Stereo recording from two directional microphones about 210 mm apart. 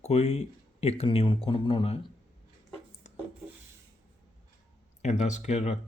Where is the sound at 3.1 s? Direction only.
35° left (ahead or behind).